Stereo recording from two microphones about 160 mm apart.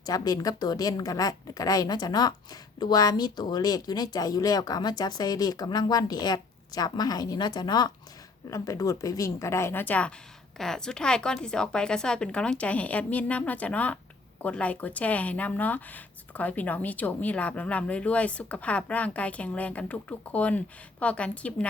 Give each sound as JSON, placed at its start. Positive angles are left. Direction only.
{"t": 0.0, "sound": "a woman's voice", "side_deg": 25}